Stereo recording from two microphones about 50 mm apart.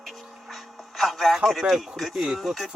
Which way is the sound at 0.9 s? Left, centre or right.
Centre.